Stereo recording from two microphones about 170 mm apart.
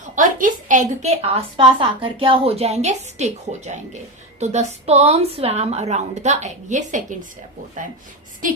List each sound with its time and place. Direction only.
0.2 s a woman's voice: 50° right (ahead or behind)